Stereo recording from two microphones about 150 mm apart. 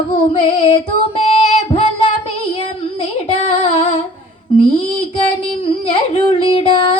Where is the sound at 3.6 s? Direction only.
40° left (ahead or behind).